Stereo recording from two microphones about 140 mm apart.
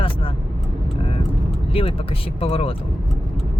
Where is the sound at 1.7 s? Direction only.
40° left (ahead or behind).